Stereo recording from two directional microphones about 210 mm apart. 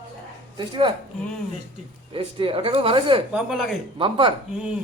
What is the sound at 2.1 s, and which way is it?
Speech, 25° right (ahead or behind).